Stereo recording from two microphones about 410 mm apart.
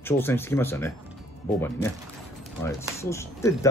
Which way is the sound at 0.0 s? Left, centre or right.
Centre.